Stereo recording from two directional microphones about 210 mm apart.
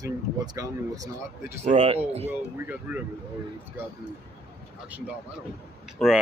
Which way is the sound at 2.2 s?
10° right (ahead or behind).